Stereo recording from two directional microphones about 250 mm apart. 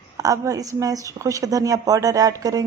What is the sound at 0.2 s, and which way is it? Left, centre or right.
A woman's voice, centre.